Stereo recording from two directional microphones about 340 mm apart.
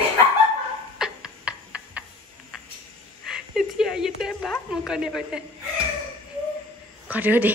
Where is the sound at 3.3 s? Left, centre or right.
Centre.